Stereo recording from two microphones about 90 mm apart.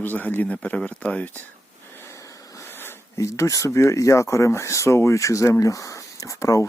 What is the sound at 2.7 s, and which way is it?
Speech, 25° left (ahead or behind).